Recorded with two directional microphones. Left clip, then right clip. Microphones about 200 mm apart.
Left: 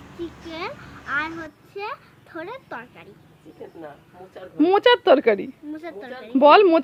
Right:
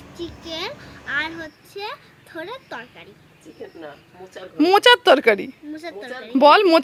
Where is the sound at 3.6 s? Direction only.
35° right (ahead or behind).